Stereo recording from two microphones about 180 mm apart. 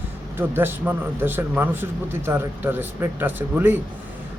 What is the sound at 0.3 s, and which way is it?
A man's voice, 10° right (ahead or behind).